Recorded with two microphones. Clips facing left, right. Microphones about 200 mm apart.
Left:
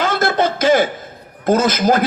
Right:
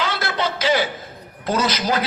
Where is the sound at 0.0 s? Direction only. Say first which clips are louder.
Left 7 dB; 50° left (ahead or behind).